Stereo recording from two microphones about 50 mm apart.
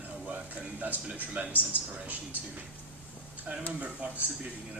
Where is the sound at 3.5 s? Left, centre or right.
Right.